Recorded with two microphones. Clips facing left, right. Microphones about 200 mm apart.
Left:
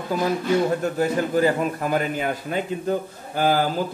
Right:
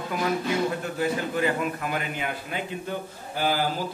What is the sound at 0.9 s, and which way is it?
A man's voice, 40° left (ahead or behind).